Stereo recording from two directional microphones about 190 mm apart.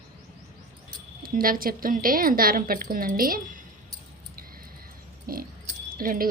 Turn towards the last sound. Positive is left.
turn(degrees=-50)  # may be behind; listen again after turning